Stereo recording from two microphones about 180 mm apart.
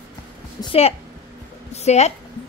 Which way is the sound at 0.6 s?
20° left (ahead or behind).